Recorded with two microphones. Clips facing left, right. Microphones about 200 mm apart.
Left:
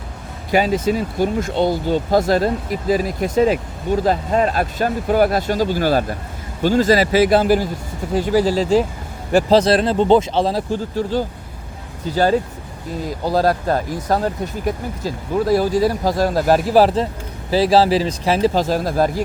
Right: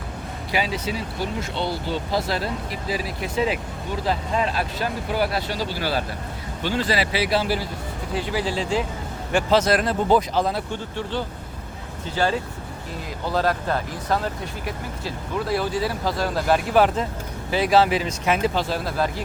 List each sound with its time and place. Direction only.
0.5 s speech: 45° left (ahead or behind)